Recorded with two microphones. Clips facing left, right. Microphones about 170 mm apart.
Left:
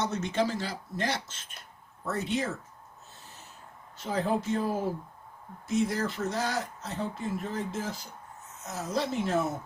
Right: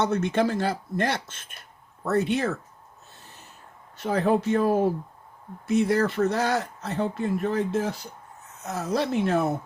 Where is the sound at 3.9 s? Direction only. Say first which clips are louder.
Right 6 dB; 65° right (ahead or behind).